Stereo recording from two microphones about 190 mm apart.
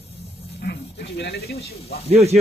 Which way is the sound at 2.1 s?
35° right (ahead or behind).